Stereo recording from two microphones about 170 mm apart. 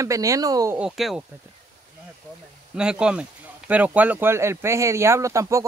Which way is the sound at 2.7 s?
5° right (ahead or behind).